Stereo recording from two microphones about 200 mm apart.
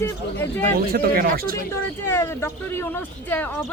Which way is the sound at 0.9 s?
50° right (ahead or behind).